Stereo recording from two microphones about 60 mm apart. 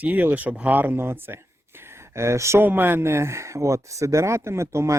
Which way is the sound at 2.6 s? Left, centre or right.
Right.